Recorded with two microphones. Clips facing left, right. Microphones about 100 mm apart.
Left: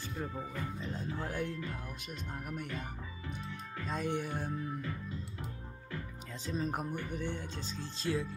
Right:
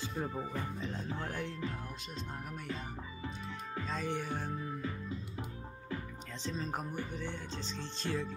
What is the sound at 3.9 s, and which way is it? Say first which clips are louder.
Speech: left 2 dB; 15° left (ahead or behind).